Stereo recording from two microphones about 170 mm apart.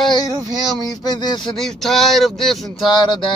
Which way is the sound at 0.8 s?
25° left (ahead or behind).